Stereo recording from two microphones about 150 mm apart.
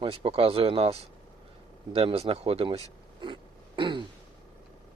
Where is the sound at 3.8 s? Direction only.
35° right (ahead or behind).